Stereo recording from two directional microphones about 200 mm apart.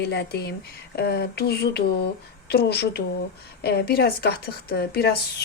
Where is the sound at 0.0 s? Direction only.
55° left (ahead or behind).